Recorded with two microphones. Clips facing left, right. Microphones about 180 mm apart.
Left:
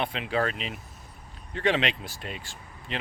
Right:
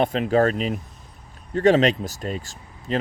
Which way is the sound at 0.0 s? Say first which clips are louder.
Right 9 dB; 45° right (ahead or behind).